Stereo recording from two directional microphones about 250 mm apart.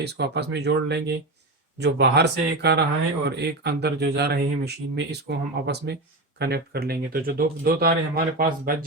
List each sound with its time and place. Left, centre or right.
0.0 s speech: right